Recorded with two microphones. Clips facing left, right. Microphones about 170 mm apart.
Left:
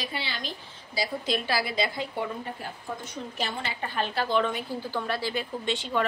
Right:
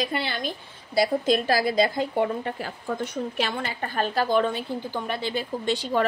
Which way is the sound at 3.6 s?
45° right (ahead or behind).